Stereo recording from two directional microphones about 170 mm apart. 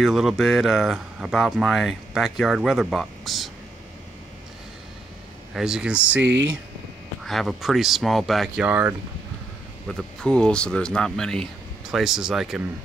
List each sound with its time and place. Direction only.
0.0 s speech: centre (ahead or behind)
5.5 s speech: 5° right (ahead or behind)
7.2 s speech: centre (ahead or behind)
9.8 s speech: 5° left (ahead or behind)